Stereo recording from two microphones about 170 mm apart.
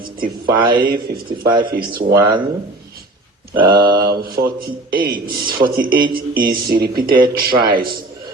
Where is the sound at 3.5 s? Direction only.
30° right (ahead or behind).